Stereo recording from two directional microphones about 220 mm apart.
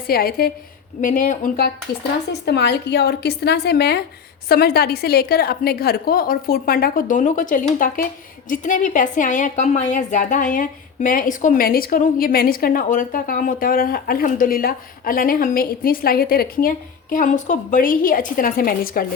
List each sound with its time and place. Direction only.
0.1 s a woman's voice: 45° left (ahead or behind)